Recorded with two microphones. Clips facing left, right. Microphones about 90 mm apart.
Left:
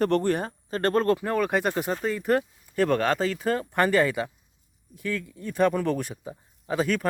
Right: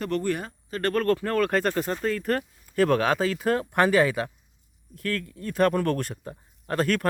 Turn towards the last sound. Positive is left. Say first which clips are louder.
# right 1 dB
turn(degrees=0)  # may be behind; listen again after turning